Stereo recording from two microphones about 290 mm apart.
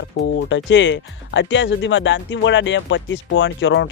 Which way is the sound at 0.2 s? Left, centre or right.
Left.